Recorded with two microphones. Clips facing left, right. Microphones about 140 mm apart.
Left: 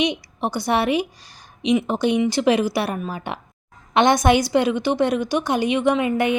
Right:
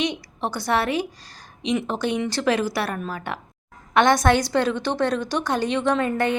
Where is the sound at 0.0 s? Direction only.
15° left (ahead or behind).